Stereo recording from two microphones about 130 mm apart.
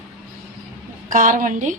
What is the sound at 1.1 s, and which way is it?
Speech, 90° right.